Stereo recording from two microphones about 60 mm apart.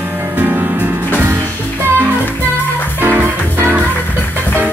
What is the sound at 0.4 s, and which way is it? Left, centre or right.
Music, right.